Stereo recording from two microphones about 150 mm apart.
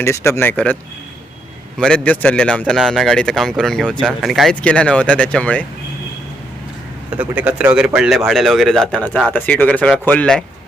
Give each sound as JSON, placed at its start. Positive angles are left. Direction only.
{"t": 0.0, "sound": "speech", "side_deg": 20}
{"t": 1.8, "sound": "speech", "side_deg": 10}
{"t": 7.1, "sound": "speech", "side_deg": -10}